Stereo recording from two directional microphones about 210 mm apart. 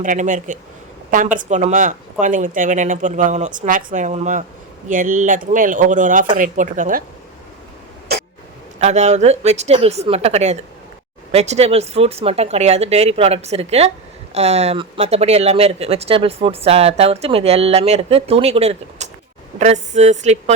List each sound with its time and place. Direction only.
0.0 s speech: 35° right (ahead or behind)
8.8 s speech: 30° right (ahead or behind)